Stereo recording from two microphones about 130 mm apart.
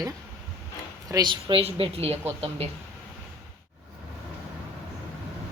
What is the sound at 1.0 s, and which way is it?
A woman's voice, 30° right (ahead or behind).